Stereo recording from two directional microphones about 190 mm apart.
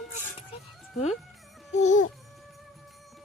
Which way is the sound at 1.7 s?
40° left (ahead or behind).